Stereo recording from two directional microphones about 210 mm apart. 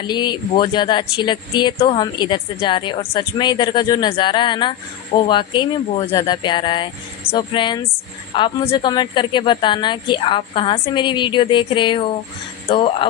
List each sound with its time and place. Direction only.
0.1 s speech: 20° left (ahead or behind)